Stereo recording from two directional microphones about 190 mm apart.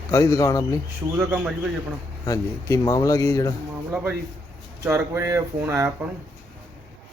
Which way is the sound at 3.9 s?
5° right (ahead or behind).